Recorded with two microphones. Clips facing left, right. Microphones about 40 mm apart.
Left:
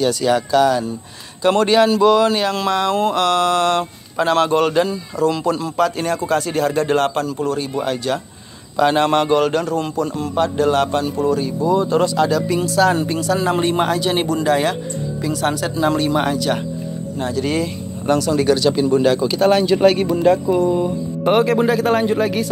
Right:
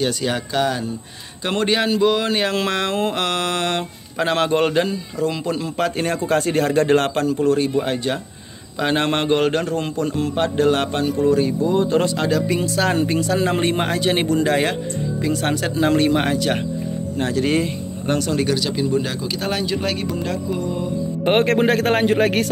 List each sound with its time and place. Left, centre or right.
0.0 s speech: right
2.3 s speech: right
3.0 s speech: right
7.8 s speech: right
12.3 s speech: centre
17.2 s a man's voice: right
18.0 s speech: centre
18.4 s speech: centre
21.3 s a man's voice: right